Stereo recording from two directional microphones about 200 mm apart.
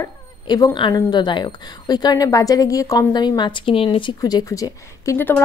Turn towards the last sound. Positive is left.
turn(degrees=10)  # may be behind; listen again after turning